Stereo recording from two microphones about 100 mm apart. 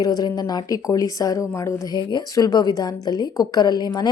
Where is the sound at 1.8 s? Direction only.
40° left (ahead or behind).